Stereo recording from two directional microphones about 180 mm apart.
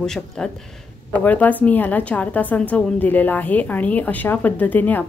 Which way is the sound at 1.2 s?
10° left (ahead or behind).